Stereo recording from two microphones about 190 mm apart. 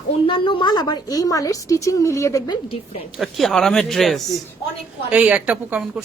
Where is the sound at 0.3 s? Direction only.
25° left (ahead or behind).